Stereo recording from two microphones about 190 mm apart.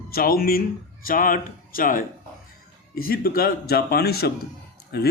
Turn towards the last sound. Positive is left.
turn(degrees=60)  # may be behind; listen again after turning